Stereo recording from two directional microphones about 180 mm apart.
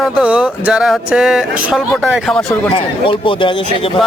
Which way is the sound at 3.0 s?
30° left (ahead or behind).